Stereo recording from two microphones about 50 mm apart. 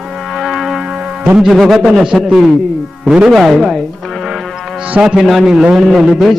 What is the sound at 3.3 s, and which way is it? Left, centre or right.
Music, centre.